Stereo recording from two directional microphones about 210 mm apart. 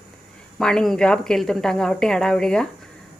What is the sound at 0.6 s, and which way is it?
A woman's voice, centre (ahead or behind).